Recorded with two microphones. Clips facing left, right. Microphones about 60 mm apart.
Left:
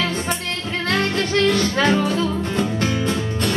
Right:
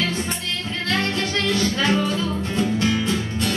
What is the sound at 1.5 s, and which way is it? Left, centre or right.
Music, left.